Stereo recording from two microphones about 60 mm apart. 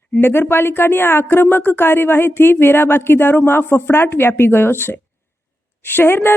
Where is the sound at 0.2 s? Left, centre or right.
Left.